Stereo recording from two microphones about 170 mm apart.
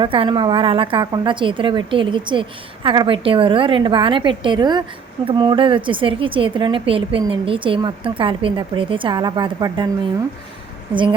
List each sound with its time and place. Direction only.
0.0 s speech: 30° right (ahead or behind)